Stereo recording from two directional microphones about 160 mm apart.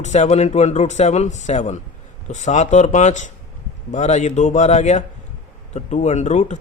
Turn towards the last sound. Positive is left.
turn(degrees=45)  # may be behind; listen again after turning